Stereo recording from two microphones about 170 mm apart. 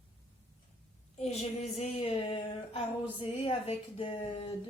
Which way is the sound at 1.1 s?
40° left (ahead or behind).